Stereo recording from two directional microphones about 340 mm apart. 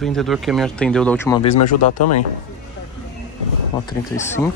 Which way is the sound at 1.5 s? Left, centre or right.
Left.